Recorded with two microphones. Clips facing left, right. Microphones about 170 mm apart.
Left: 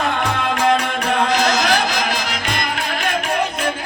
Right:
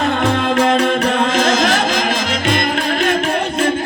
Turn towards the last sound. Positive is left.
turn(degrees=-25)  # may be behind; listen again after turning